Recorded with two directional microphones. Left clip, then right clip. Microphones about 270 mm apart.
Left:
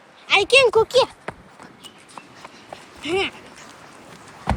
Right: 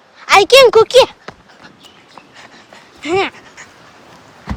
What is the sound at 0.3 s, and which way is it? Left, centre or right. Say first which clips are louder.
Speech: right 8 dB; right.